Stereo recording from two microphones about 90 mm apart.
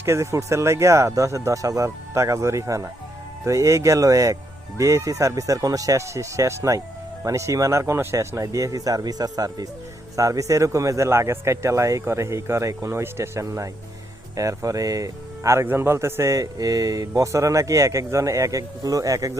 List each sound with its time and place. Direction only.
0.0 s speech: 30° right (ahead or behind)